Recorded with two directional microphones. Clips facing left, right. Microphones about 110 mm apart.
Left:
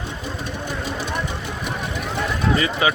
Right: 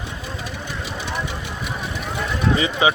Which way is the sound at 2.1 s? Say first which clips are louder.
Even; 15° right (ahead or behind).